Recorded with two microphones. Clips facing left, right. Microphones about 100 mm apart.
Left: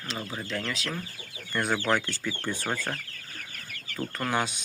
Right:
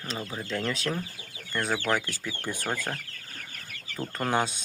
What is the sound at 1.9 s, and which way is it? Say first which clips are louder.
Speech: left 1 dB; 10° right (ahead or behind).